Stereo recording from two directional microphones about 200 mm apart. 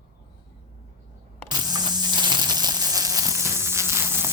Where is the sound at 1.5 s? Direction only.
20° right (ahead or behind).